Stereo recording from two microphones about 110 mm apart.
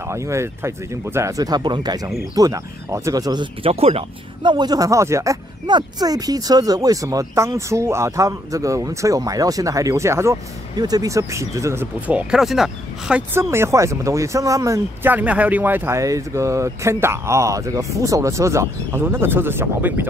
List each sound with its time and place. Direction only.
0.1 s speech: 25° right (ahead or behind)
3.6 s speech: 70° right (ahead or behind)
4.4 s speech: 45° right (ahead or behind)
5.7 s speech: 40° right (ahead or behind); by 10.3 s 25° right (ahead or behind)
10.8 s speech: 35° right (ahead or behind)
12.1 s speech: 10° right (ahead or behind)
13.3 s speech: 25° right (ahead or behind)
15.0 s speech: 15° right (ahead or behind)